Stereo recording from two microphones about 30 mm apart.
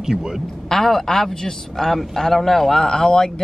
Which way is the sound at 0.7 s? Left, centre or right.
Centre.